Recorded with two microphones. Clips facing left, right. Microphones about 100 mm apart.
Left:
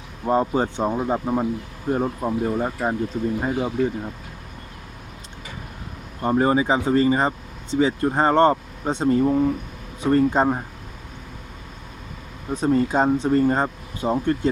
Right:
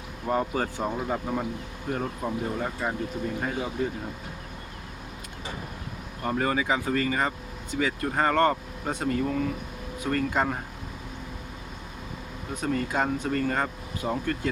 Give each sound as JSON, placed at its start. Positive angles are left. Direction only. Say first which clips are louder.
{"t": 0.3, "sound": "speech", "louder": "left 6 dB", "side_deg": 25}
{"t": 6.2, "sound": "speech", "louder": "left 7 dB", "side_deg": 25}
{"t": 12.5, "sound": "speech", "louder": "left 8 dB", "side_deg": 30}